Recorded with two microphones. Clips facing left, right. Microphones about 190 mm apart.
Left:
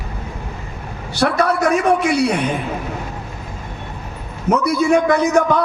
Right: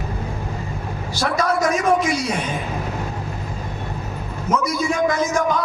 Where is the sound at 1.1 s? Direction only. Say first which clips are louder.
Left 4 dB; 65° left (ahead or behind).